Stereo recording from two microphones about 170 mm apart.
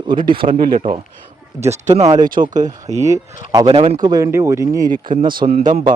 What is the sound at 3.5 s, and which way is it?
A man's voice, 25° right (ahead or behind).